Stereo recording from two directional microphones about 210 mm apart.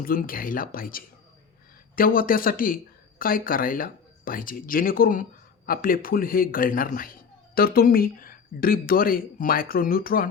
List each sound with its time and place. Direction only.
0.0 s speech: 45° left (ahead or behind)